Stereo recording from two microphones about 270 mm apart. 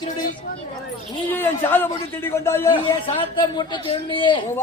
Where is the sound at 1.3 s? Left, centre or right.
Centre.